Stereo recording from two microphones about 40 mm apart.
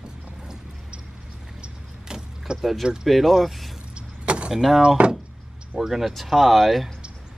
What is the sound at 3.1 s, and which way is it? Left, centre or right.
Speech, centre.